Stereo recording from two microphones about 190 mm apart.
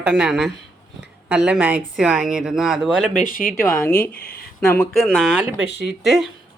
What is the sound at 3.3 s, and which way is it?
Speech, 45° left (ahead or behind).